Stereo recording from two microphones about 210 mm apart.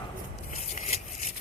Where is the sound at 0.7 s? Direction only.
30° left (ahead or behind).